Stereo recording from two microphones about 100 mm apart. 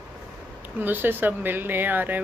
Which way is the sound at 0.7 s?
20° right (ahead or behind).